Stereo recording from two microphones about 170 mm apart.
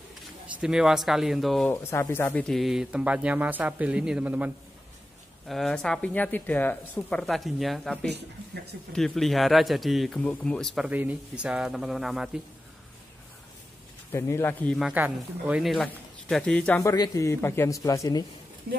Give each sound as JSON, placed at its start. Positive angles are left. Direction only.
{"t": 0.6, "sound": "speech", "side_deg": -5}
{"t": 1.7, "sound": "speech", "side_deg": 15}
{"t": 5.5, "sound": "speech", "side_deg": 5}
{"t": 14.1, "sound": "speech", "side_deg": 15}
{"t": 14.8, "sound": "speech", "side_deg": -5}
{"t": 16.8, "sound": "a man's voice", "side_deg": 20}
{"t": 18.7, "sound": "a woman's voice", "side_deg": -70}